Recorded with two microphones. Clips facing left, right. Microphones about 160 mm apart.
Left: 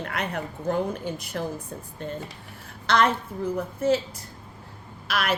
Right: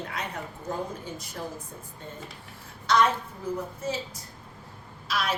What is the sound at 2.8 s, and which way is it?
A woman's voice, 60° left (ahead or behind).